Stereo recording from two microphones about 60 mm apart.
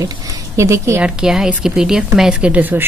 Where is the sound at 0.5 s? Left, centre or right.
Right.